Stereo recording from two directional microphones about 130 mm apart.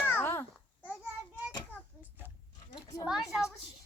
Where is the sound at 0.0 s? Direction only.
15° left (ahead or behind).